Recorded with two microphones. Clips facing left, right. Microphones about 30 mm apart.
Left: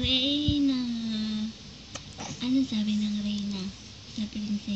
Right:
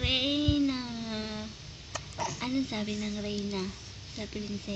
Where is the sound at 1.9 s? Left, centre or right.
Right.